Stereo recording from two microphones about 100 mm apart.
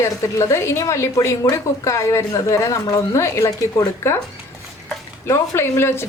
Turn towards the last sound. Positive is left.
turn(degrees=25)  # may be behind; listen again after turning